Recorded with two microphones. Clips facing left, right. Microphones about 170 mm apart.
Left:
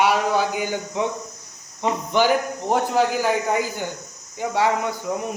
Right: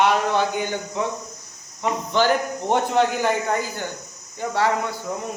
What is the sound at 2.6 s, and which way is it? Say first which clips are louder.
Speech: even; centre (ahead or behind).